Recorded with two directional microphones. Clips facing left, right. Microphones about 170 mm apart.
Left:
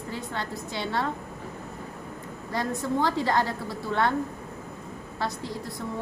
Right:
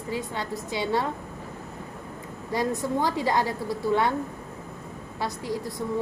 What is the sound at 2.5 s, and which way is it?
A woman's voice, 15° right (ahead or behind).